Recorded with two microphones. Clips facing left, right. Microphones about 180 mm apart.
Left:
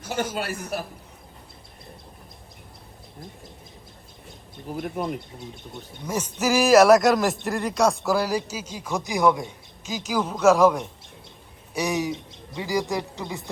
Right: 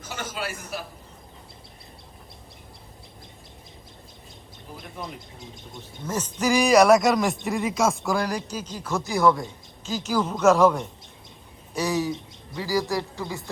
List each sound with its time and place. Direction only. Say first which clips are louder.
4.8 s speech: left 9 dB; 60° left (ahead or behind)
6.1 s speech: even; 10° left (ahead or behind)